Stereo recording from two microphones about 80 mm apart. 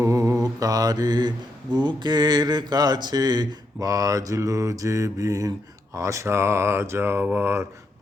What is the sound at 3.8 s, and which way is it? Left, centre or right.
Speech, right.